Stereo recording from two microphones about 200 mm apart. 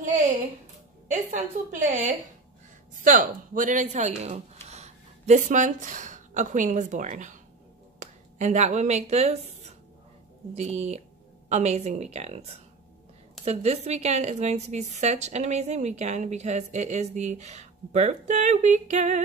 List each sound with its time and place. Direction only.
0.0 s music: 35° right (ahead or behind)
1.1 s a woman's voice: 40° right (ahead or behind)
3.0 s a woman's voice: 40° right (ahead or behind)